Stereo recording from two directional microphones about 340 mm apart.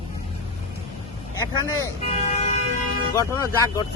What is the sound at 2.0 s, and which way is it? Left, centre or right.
Vehicle, centre.